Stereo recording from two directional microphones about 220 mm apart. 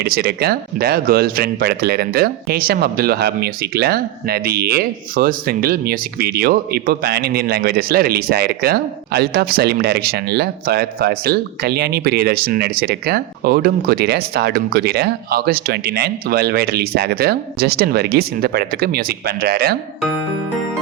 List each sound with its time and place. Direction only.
0.0 s speech: 45° right (ahead or behind)